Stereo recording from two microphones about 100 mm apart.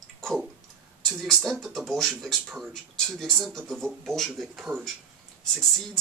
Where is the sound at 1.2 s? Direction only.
Centre (ahead or behind).